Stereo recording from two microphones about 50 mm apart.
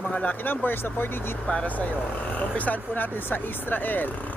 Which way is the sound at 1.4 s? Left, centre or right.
Left.